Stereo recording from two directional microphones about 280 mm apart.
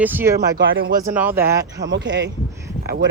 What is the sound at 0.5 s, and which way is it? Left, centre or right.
Speech, right.